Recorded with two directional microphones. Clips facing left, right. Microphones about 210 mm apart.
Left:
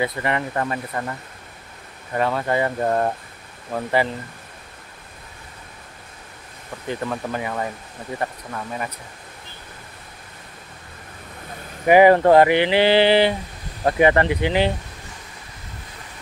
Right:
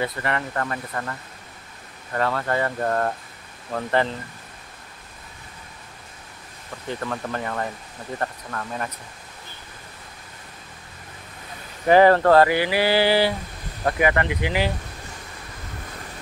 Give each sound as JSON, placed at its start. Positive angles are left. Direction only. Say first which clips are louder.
{"t": 0.0, "sound": "speech", "louder": "left 3 dB", "side_deg": 15}
{"t": 2.1, "sound": "speech", "louder": "left 2 dB", "side_deg": 15}
{"t": 7.1, "sound": "speech", "louder": "left 2 dB", "side_deg": 10}
{"t": 11.8, "sound": "speech", "louder": "left 2 dB", "side_deg": 15}